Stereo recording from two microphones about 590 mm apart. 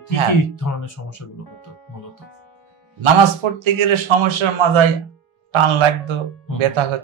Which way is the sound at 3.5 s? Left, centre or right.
Right.